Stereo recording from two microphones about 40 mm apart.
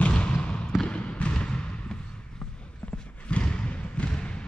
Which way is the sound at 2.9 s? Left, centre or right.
Left.